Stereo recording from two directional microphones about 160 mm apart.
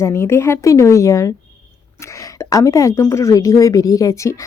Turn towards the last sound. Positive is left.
turn(degrees=20)  # may be behind; listen again after turning